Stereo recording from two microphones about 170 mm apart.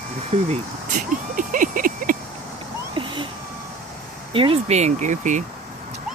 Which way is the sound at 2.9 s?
30° right (ahead or behind).